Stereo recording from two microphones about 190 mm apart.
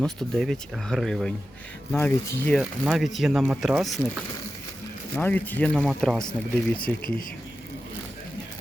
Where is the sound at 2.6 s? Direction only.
5° right (ahead or behind).